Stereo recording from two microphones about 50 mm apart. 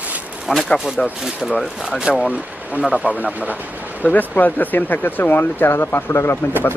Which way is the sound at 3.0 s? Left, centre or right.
Right.